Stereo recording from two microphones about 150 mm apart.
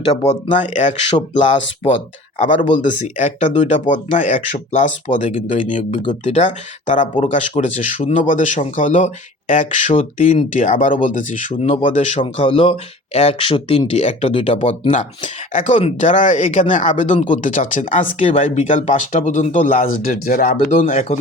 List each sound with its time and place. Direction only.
0.3 s speech: 55° left (ahead or behind)
2.4 s speech: 55° left (ahead or behind)
11.5 s speech: 40° left (ahead or behind)
12.5 s speech: 35° left (ahead or behind)
17.3 s speech: 55° left (ahead or behind)